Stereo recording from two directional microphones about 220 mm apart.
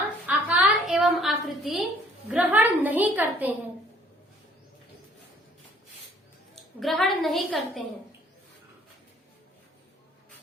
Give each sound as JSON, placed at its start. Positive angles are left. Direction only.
{"t": 0.3, "sound": "a sound", "side_deg": -5}
{"t": 2.3, "sound": "a woman's voice", "side_deg": -5}
{"t": 6.7, "sound": "a woman's voice", "side_deg": 0}